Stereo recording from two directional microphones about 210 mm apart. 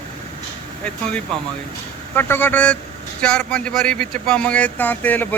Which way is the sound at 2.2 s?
10° left (ahead or behind).